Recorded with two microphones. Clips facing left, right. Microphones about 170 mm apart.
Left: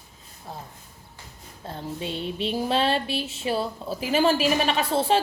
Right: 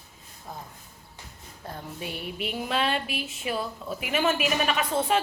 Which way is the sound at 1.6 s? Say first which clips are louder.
Left 4 dB; 25° left (ahead or behind).